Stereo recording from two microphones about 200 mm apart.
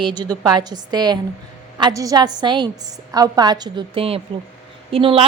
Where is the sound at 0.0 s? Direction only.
20° right (ahead or behind).